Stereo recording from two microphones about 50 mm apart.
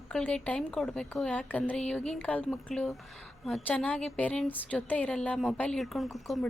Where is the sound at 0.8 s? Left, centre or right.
Centre.